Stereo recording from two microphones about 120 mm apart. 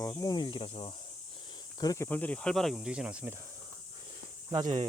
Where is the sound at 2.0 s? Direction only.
15° left (ahead or behind); by 3.3 s 10° right (ahead or behind).